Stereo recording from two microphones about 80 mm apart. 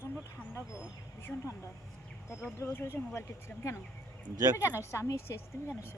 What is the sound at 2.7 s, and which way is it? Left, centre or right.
Speech, left.